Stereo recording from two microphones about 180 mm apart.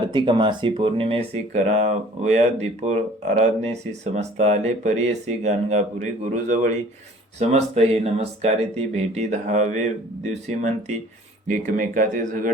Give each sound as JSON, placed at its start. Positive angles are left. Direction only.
{"t": 0.1, "sound": "speech", "side_deg": -25}
{"t": 7.3, "sound": "speech", "side_deg": -35}